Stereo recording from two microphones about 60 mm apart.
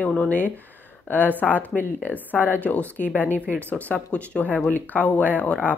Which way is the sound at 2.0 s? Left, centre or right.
Left.